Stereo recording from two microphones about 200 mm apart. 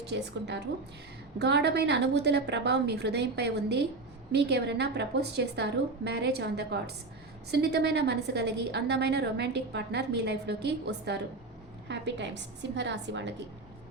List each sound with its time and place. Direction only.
0.0 s a woman's voice: 60° right (ahead or behind)